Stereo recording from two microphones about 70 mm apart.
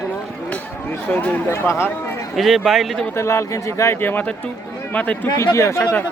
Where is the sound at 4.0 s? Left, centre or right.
Left.